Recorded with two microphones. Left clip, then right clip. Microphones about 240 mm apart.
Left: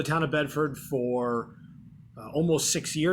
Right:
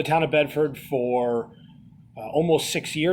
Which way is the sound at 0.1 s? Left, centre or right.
Centre.